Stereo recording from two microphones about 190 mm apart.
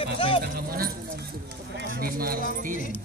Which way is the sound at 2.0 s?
50° right (ahead or behind).